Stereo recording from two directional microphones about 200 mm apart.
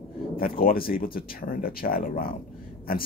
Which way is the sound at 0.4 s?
45° left (ahead or behind).